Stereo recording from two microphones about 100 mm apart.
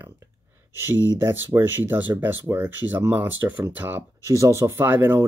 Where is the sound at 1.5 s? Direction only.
20° right (ahead or behind).